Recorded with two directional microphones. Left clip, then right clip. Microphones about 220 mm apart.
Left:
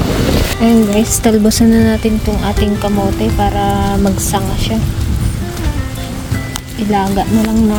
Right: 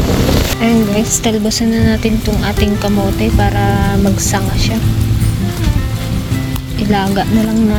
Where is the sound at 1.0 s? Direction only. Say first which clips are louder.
Left 3 dB; 30° left (ahead or behind).